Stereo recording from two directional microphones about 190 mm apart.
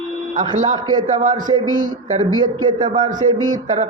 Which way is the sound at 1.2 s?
40° right (ahead or behind).